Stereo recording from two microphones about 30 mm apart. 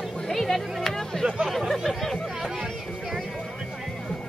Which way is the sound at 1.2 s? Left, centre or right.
Right.